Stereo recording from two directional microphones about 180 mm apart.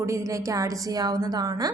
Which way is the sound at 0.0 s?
15° right (ahead or behind).